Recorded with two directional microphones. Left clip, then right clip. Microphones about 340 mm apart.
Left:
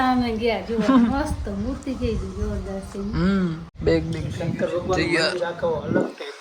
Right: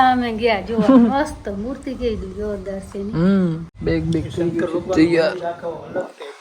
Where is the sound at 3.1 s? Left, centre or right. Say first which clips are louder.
Right 5 dB; centre.